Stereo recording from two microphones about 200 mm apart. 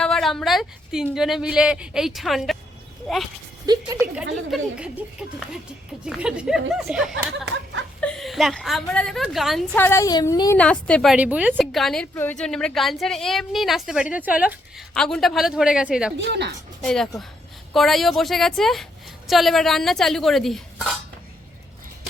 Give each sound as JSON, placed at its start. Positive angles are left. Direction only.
{"t": 0.0, "sound": "a woman's voice", "side_deg": 0}
{"t": 3.7, "sound": "a woman's voice", "side_deg": -20}
{"t": 4.0, "sound": "a woman's voice", "side_deg": -5}
{"t": 6.1, "sound": "a woman's voice", "side_deg": -5}
{"t": 9.7, "sound": "a woman's voice", "side_deg": 10}
{"t": 16.1, "sound": "speech", "side_deg": -60}
{"t": 16.8, "sound": "a woman's voice", "side_deg": 0}